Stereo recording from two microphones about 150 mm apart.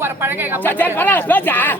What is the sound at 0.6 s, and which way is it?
Speech, 15° left (ahead or behind).